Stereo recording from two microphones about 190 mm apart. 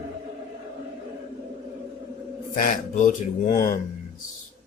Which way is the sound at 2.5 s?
45° left (ahead or behind).